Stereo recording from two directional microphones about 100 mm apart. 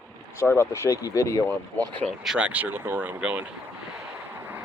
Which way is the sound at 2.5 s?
15° right (ahead or behind).